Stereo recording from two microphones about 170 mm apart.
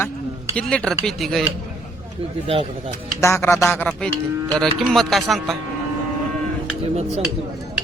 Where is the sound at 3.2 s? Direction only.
15° left (ahead or behind).